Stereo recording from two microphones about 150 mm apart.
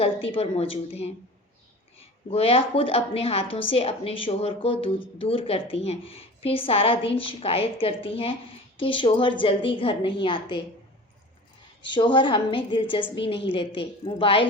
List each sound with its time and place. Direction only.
0.0 s a woman's voice: 40° left (ahead or behind)
11.8 s a woman's voice: 35° left (ahead or behind)